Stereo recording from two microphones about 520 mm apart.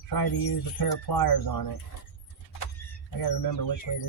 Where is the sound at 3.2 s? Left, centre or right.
Left.